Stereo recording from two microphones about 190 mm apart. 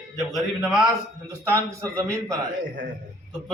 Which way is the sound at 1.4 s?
15° right (ahead or behind).